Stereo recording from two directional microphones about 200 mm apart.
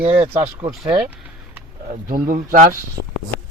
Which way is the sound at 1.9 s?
45° right (ahead or behind).